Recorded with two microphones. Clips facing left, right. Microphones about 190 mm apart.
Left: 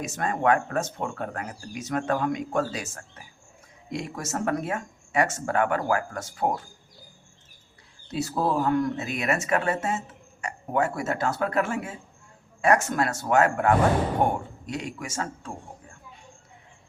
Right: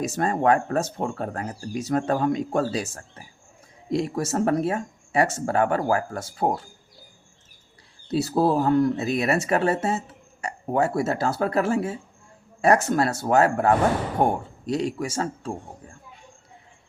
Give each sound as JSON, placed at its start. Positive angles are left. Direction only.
{"t": 0.0, "sound": "speech", "side_deg": -35}
{"t": 8.1, "sound": "speech", "side_deg": -35}